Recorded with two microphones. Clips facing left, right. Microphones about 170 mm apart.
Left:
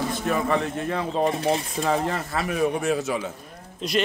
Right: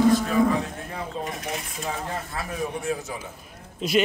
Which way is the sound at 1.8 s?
75° left (ahead or behind).